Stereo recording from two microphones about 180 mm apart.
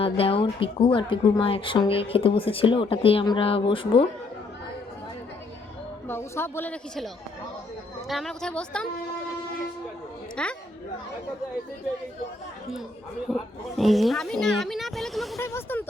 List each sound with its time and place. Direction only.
0.0 s speech: 30° left (ahead or behind)
6.1 s a woman's voice: 15° left (ahead or behind)
10.4 s a woman's voice: 5° left (ahead or behind)
13.3 s a woman's voice: centre (ahead or behind)
15.4 s speech: 15° left (ahead or behind)